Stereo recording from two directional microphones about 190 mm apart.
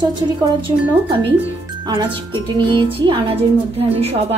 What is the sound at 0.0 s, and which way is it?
Speech, 25° right (ahead or behind).